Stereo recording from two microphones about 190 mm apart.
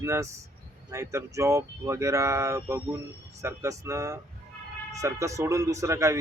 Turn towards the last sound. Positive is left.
turn(degrees=-15)  # may be behind; listen again after turning